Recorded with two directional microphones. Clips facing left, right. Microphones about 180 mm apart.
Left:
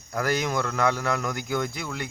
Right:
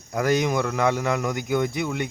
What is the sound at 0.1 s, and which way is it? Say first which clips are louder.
Speech: right 4 dB; 15° right (ahead or behind).